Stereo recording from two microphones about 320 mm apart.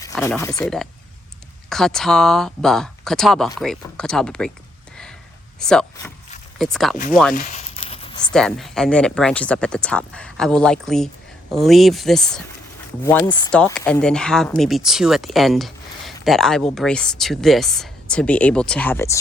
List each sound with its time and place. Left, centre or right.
0.1 s speech: centre
5.5 s speech: centre
7.3 s crumpling: left
8.3 s speech: centre